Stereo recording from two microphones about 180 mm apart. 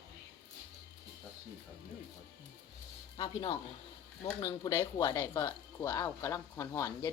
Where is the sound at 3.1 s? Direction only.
25° left (ahead or behind).